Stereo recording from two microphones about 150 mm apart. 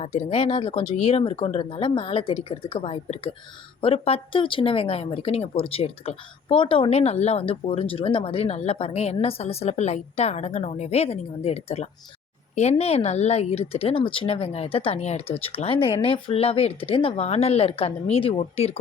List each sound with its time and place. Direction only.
0.0 s a woman's voice: 45° left (ahead or behind)